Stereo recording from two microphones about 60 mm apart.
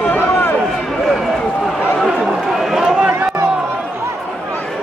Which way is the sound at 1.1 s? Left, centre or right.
Centre.